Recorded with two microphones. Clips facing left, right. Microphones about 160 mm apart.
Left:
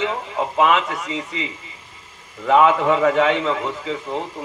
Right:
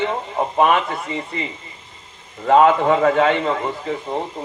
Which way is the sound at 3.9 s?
35° right (ahead or behind).